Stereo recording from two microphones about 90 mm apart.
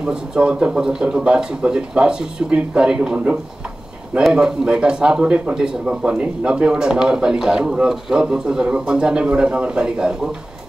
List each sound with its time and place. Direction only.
0.0 s speech: 10° right (ahead or behind)